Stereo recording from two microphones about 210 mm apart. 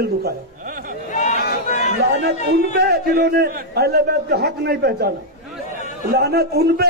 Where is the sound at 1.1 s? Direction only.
35° left (ahead or behind).